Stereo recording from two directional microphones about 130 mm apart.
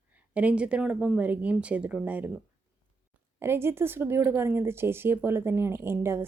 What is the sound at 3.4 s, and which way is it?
Speech, 20° right (ahead or behind).